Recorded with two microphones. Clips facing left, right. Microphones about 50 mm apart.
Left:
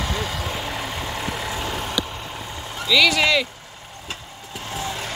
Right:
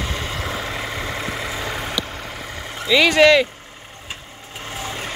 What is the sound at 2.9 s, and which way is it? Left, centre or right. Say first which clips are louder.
Speech: right 5 dB; right.